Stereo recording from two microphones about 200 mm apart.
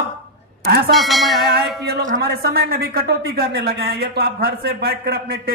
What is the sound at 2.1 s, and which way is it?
Speech, 50° right (ahead or behind).